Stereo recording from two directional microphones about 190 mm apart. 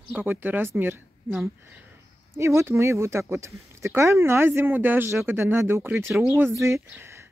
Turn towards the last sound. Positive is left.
turn(degrees=-15)  # may be behind; listen again after turning